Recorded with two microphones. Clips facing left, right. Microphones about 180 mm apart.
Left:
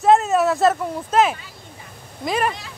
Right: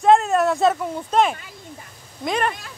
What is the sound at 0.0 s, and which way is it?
Speech, centre (ahead or behind).